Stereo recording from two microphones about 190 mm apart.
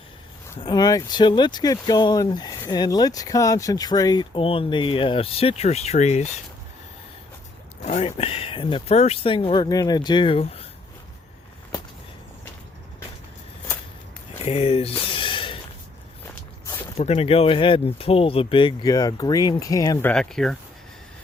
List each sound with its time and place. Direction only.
0.6 s speech: 20° left (ahead or behind); by 6.2 s 35° left (ahead or behind)
7.9 s speech: 35° left (ahead or behind)
14.4 s a sound: 30° left (ahead or behind)
16.2 s walk: 10° left (ahead or behind)
17.0 s speech: 30° left (ahead or behind); by 20.6 s centre (ahead or behind)